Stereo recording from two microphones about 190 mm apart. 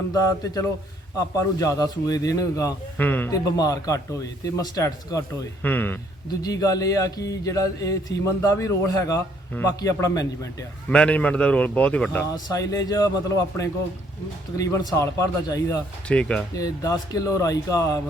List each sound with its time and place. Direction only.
0.1 s speech: 20° left (ahead or behind)
10.9 s speech: 5° left (ahead or behind)
12.3 s speech: 20° left (ahead or behind)
16.0 s speech: 5° left (ahead or behind)
16.6 s speech: 20° left (ahead or behind)